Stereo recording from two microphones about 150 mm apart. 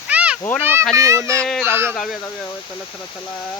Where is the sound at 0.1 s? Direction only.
10° right (ahead or behind).